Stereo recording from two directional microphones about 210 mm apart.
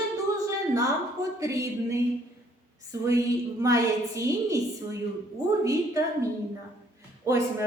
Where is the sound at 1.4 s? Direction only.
15° right (ahead or behind).